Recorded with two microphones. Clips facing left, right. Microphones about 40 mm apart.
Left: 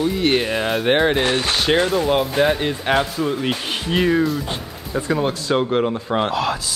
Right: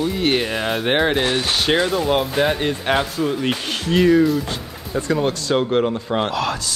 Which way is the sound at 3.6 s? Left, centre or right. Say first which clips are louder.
Right 4 dB; centre.